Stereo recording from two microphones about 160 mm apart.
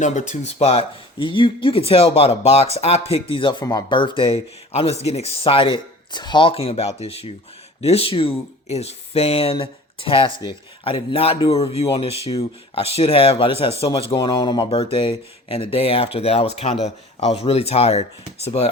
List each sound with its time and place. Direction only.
0.0 s speech: 45° left (ahead or behind)